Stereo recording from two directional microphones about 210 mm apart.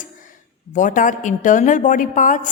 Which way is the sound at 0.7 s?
40° left (ahead or behind).